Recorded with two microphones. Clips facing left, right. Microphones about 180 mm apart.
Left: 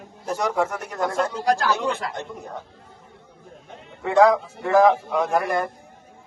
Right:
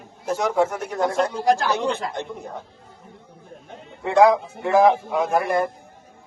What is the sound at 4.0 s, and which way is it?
Speech, 15° right (ahead or behind).